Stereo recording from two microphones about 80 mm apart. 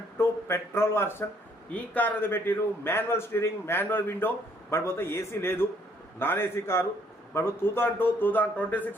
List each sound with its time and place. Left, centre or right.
0.2 s a man's voice: left
1.7 s a man's voice: centre